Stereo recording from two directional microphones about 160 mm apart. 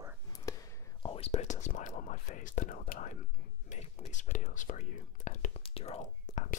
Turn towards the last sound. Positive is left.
turn(degrees=50)  # may be behind; listen again after turning